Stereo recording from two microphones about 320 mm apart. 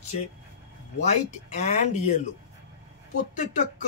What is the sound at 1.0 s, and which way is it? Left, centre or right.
Speech, left.